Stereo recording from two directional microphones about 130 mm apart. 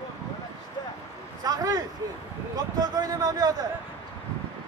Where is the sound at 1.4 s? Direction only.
30° right (ahead or behind).